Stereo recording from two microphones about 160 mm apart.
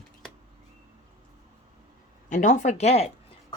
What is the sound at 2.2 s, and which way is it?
Speech, 50° left (ahead or behind).